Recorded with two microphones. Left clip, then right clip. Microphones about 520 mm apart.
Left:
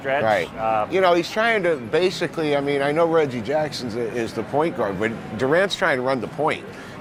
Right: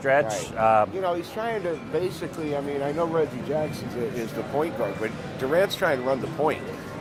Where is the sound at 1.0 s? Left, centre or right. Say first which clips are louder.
Left 9 dB; left.